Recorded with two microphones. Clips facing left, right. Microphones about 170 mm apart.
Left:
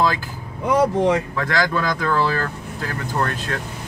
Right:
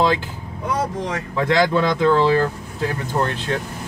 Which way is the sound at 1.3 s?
25° right (ahead or behind).